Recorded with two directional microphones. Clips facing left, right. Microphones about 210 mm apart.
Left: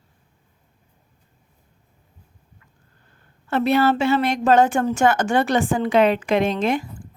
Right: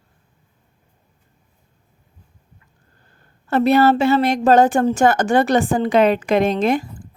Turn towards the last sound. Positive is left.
turn(degrees=-40)  # may be behind; listen again after turning